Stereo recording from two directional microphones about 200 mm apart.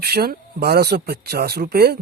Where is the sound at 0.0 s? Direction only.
50° right (ahead or behind).